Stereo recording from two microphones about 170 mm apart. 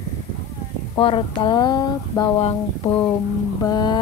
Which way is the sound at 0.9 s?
30° left (ahead or behind).